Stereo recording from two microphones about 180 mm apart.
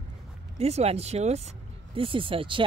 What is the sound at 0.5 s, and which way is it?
Speech, 35° right (ahead or behind).